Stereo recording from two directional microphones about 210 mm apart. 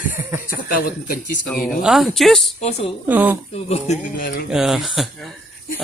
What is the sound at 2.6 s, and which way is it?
Speech, 30° left (ahead or behind).